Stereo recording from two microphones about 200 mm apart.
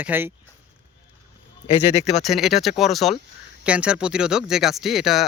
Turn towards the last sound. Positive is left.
turn(degrees=0)  # may be behind; listen again after turning